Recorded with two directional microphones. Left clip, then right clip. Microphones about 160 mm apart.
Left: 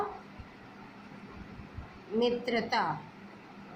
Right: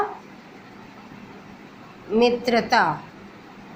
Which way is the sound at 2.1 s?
30° right (ahead or behind).